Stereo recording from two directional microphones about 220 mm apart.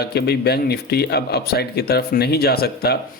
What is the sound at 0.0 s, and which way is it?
Speech, 45° left (ahead or behind).